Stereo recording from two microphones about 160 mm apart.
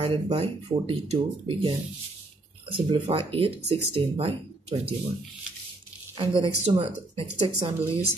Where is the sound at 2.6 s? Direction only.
35° right (ahead or behind).